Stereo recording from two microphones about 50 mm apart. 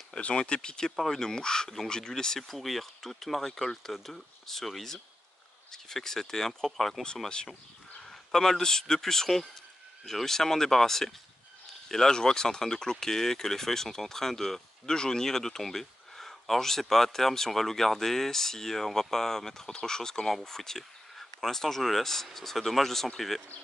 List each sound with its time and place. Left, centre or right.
0.2 s speech: centre